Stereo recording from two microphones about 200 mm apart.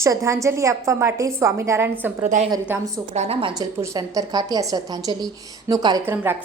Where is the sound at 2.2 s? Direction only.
35° right (ahead or behind).